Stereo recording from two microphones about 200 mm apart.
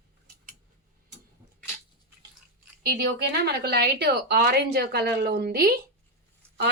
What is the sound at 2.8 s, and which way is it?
A woman's voice, 50° right (ahead or behind).